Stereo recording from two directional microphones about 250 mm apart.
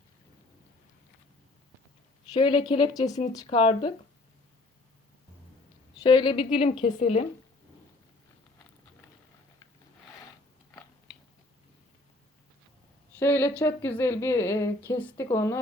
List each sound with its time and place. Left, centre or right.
2.3 s a woman's voice: centre
6.0 s a woman's voice: centre
13.1 s speech: centre